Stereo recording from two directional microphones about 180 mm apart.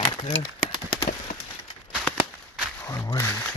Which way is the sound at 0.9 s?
20° left (ahead or behind).